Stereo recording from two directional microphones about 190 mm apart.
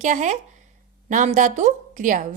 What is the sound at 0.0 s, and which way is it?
A woman's voice, 40° right (ahead or behind).